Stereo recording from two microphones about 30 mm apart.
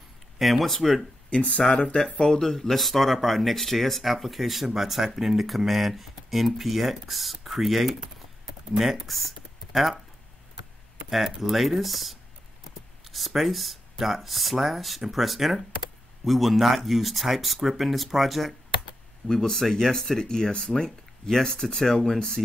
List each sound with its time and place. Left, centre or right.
0.4 s speech: centre
1.3 s speech: left
2.0 s speech: centre
9.1 s a sound: centre
11.1 s speech: centre
19.2 s speech: centre